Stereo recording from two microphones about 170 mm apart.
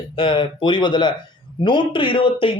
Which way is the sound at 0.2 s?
30° left (ahead or behind).